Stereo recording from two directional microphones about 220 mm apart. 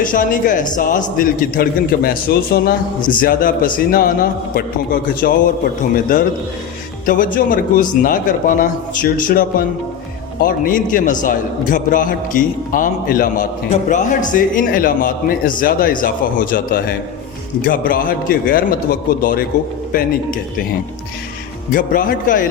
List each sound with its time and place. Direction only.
0.0 s a man's voice: 40° left (ahead or behind)
7.0 s a man's voice: 40° left (ahead or behind)
21.7 s a man's voice: 40° left (ahead or behind)